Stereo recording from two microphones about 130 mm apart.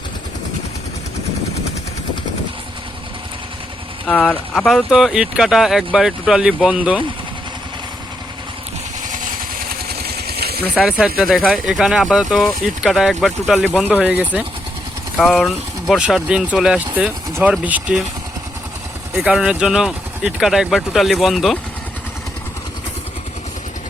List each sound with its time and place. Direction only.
4.0 s speech: 10° left (ahead or behind); by 7.0 s 10° right (ahead or behind)
9.0 s vehicle: 90° right
10.8 s speech: 5° right (ahead or behind)
15.2 s speech: 5° left (ahead or behind)
19.1 s speech: 5° right (ahead or behind)